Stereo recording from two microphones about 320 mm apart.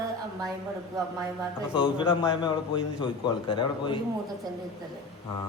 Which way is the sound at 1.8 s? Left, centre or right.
Centre.